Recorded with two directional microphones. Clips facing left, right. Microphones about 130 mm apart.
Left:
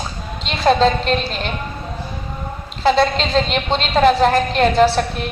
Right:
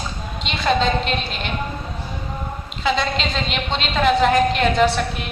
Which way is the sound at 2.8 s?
40° left (ahead or behind).